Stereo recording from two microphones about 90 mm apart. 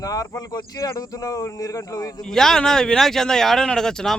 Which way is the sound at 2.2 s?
5° left (ahead or behind).